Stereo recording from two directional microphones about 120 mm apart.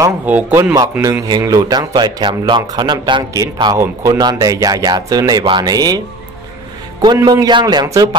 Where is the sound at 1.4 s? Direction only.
30° right (ahead or behind).